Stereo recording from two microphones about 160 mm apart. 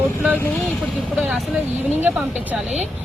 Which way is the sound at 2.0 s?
10° right (ahead or behind).